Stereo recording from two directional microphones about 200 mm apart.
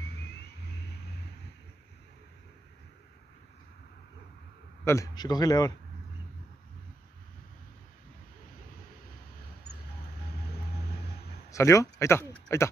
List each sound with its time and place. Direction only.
4.8 s a man's voice: 15° left (ahead or behind)
11.5 s speech: 15° left (ahead or behind)